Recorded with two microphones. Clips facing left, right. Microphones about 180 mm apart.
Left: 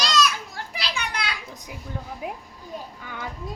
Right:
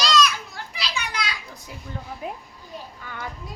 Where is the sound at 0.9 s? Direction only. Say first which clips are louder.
Right 1 dB; 60° left (ahead or behind).